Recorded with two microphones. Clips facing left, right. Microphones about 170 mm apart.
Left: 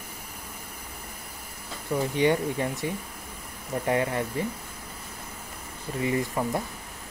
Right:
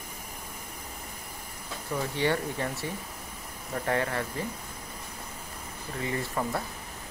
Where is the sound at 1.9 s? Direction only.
10° left (ahead or behind).